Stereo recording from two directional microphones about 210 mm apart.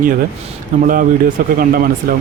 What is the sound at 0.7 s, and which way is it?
Speech, 40° right (ahead or behind).